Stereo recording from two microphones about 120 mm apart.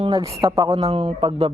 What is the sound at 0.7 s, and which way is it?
Speech, 60° right (ahead or behind).